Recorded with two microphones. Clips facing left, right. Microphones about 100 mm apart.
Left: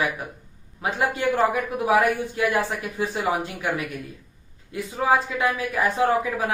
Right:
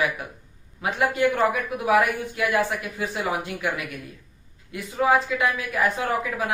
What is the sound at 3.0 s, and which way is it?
Speech, 30° left (ahead or behind).